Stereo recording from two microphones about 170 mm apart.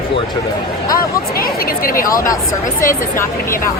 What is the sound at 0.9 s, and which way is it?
Speech, 60° left (ahead or behind).